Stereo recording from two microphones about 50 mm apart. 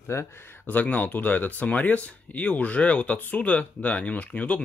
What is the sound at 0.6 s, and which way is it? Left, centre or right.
Speech, left.